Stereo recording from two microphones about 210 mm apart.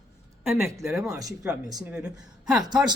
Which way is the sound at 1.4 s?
5° right (ahead or behind).